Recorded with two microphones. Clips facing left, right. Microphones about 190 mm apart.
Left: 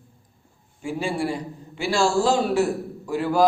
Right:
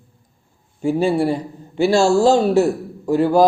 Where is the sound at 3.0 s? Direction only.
40° right (ahead or behind).